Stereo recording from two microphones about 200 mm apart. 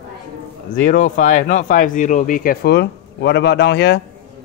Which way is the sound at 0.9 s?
40° left (ahead or behind).